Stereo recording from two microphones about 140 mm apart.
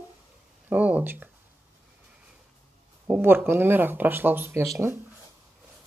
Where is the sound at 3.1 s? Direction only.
15° right (ahead or behind).